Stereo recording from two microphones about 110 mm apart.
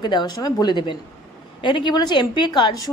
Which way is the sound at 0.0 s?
40° left (ahead or behind).